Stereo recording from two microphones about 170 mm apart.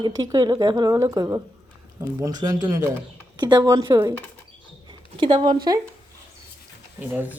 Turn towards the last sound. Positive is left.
turn(degrees=-10)  # may be behind; listen again after turning